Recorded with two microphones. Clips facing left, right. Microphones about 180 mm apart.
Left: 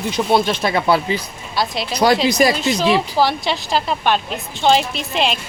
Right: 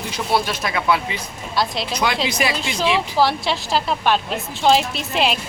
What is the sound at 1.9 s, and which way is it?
Speech, 40° left (ahead or behind).